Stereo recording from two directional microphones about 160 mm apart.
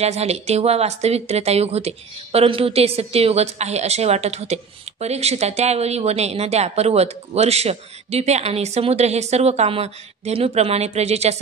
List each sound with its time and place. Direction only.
0.0 s speech: 40° right (ahead or behind)